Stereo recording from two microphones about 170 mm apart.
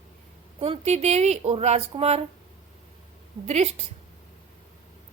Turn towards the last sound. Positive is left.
turn(degrees=-40)  # may be behind; listen again after turning